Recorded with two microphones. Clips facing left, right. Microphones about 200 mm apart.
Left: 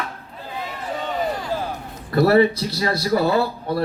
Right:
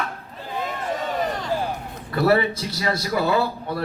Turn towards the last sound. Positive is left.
turn(degrees=35)  # may be behind; listen again after turning